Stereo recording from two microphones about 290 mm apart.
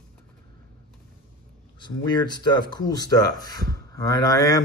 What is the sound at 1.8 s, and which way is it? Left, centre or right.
Speech, centre.